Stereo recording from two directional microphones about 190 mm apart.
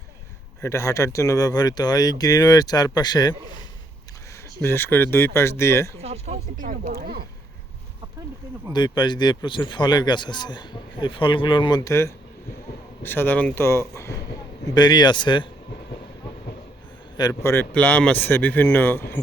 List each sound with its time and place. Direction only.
0.6 s speech: 15° left (ahead or behind)
4.6 s speech: 10° left (ahead or behind)
6.0 s speech: 35° right (ahead or behind); by 7.3 s 55° right (ahead or behind)
8.7 s speech: 25° left (ahead or behind)
17.2 s speech: 15° left (ahead or behind)